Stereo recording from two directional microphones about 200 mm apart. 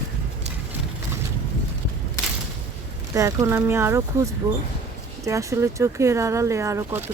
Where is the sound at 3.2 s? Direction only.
15° right (ahead or behind).